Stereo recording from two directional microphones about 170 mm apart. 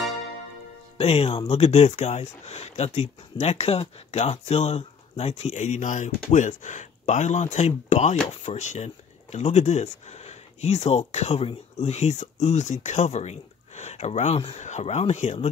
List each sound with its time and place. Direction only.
0.9 s speech: 35° left (ahead or behind)